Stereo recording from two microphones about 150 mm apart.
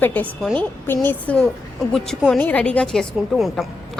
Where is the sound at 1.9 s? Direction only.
Centre (ahead or behind).